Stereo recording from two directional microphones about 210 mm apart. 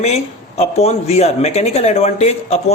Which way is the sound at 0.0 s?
30° left (ahead or behind).